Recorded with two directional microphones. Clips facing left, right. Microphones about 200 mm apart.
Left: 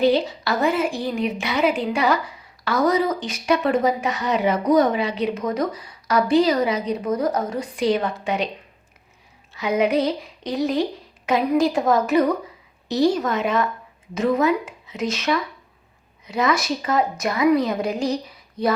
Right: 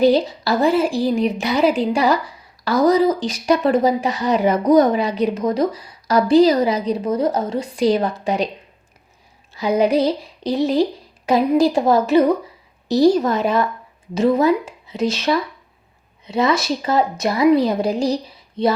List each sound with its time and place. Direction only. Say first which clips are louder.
0.0 s a woman's voice: right 4 dB; 40° right (ahead or behind)
9.6 s a woman's voice: right 3 dB; 35° right (ahead or behind)